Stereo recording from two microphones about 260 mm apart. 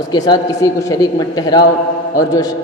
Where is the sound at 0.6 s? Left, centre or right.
Centre.